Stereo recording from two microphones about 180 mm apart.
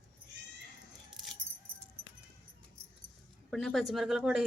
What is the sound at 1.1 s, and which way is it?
Keys jangling, centre (ahead or behind).